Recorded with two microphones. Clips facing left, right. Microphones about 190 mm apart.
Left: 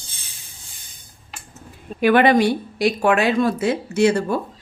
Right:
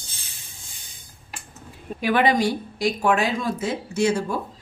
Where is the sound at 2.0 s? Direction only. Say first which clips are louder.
Left 5 dB; 60° left (ahead or behind).